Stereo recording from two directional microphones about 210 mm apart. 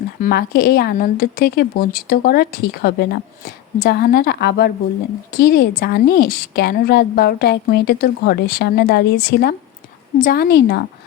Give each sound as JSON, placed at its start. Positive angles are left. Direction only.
{"t": 0.2, "sound": "a woman's voice", "side_deg": 45}